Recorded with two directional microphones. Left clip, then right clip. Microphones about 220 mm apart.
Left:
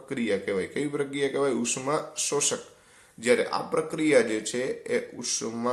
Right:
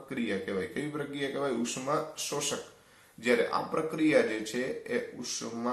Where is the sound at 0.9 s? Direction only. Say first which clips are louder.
Left 10 dB; 45° left (ahead or behind).